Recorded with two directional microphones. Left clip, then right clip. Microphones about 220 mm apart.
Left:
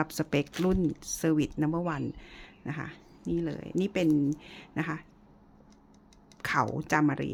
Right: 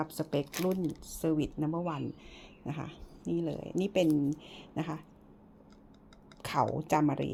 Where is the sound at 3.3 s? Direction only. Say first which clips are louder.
Left 2 dB; 20° left (ahead or behind).